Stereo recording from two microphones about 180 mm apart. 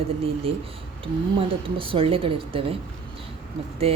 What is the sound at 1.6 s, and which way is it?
A woman's voice, 30° right (ahead or behind).